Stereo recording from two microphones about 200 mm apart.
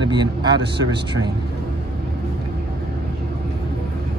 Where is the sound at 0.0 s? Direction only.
20° right (ahead or behind).